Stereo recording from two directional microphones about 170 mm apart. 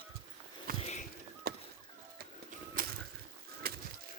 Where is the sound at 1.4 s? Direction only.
65° right (ahead or behind).